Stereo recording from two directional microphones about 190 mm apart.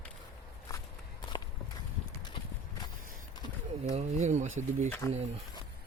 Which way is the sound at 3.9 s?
35° right (ahead or behind).